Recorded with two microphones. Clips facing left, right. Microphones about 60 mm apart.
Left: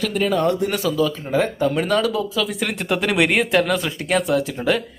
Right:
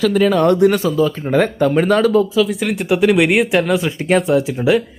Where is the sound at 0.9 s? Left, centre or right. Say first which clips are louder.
Right 4 dB; right.